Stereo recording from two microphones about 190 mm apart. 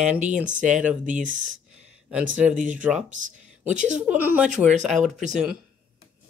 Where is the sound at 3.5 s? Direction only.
5° right (ahead or behind).